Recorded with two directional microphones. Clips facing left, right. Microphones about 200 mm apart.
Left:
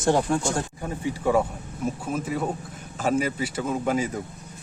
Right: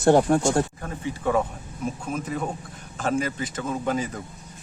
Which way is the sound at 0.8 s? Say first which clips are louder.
Left 2 dB; 10° left (ahead or behind).